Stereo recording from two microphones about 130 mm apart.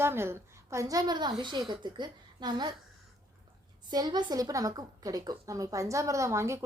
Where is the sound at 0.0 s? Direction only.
20° right (ahead or behind); by 2.7 s 35° right (ahead or behind).